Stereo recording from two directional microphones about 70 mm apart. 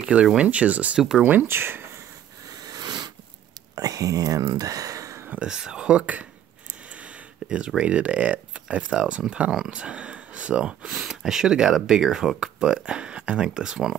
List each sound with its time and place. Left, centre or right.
0.0 s speech: centre
0.9 s speech: centre
1.2 s speech: right
2.6 s a sound: right
3.7 s speech: right
5.4 s speech: centre